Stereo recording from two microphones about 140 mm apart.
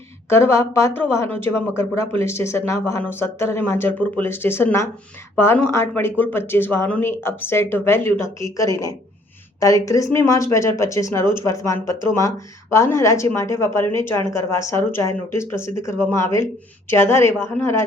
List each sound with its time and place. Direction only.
0.3 s speech: 20° left (ahead or behind)